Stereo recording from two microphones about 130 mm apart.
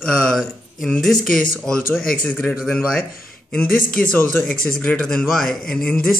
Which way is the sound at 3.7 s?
90° left.